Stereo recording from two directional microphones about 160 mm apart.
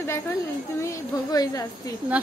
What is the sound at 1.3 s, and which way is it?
Speech, 25° left (ahead or behind).